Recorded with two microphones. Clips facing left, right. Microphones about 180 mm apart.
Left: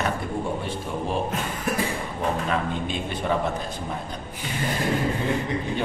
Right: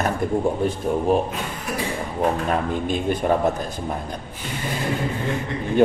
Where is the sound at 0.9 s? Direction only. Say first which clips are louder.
Right 9 dB; 45° right (ahead or behind).